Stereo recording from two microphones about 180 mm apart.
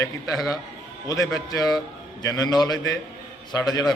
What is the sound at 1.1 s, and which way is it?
A man's voice, 20° left (ahead or behind).